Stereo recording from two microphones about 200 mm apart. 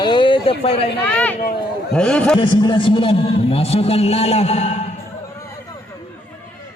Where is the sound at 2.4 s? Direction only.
25° left (ahead or behind).